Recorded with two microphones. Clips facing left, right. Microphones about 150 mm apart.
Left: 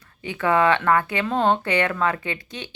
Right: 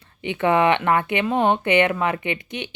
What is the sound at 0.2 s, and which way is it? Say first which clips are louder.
Speech: right 2 dB; 20° right (ahead or behind).